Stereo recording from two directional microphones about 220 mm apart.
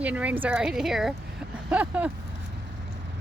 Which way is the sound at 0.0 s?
5° right (ahead or behind).